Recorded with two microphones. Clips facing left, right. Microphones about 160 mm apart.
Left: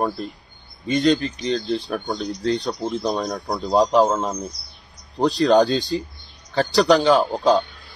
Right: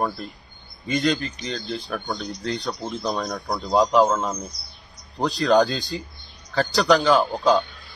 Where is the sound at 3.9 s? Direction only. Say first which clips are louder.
Left 1 dB; 25° left (ahead or behind).